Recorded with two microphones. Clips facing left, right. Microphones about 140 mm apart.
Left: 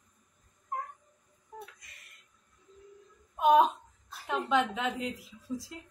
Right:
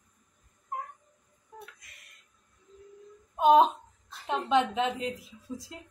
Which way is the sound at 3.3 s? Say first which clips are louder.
Right 3 dB; 25° right (ahead or behind).